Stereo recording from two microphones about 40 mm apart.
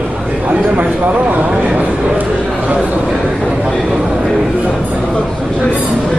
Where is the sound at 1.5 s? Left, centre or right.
Right.